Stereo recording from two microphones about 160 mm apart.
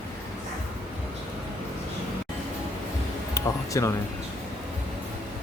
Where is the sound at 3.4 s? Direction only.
20° left (ahead or behind).